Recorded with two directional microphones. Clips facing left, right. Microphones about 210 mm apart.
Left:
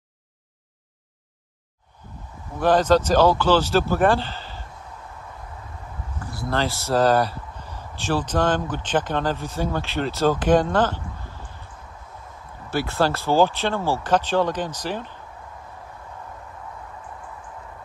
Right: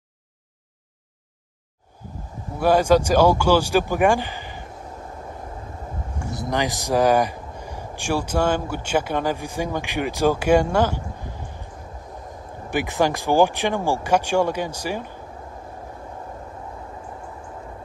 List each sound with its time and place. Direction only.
2.6 s speech: 10° right (ahead or behind)
6.1 s speech: 20° right (ahead or behind)